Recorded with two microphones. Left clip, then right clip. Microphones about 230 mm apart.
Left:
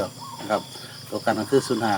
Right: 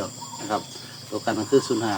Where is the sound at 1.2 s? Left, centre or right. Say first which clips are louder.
Even; left.